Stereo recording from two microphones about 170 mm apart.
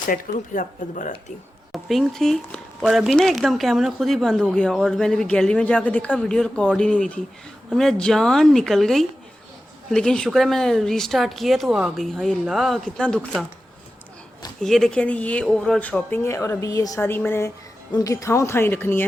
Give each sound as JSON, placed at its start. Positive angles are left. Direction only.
{"t": 0.1, "sound": "speech", "side_deg": 50}
{"t": 1.7, "sound": "speech", "side_deg": 0}
{"t": 14.6, "sound": "speech", "side_deg": 5}